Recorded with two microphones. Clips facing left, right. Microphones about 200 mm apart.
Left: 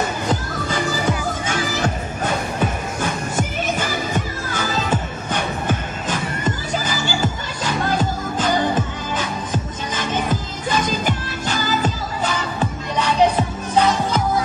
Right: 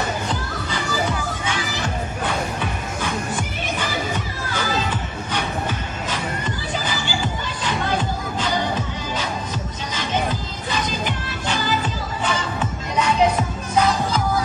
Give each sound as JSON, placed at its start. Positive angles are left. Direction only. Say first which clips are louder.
{"t": 2.6, "sound": "music", "louder": "left 4 dB", "side_deg": 45}
{"t": 5.3, "sound": "music", "louder": "left 3 dB", "side_deg": 50}
{"t": 13.0, "sound": "music", "louder": "left 2 dB", "side_deg": 30}